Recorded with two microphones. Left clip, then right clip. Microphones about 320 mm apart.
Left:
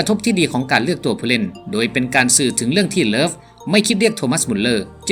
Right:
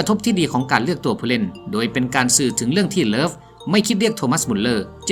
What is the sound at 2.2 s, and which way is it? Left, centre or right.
Speech, right.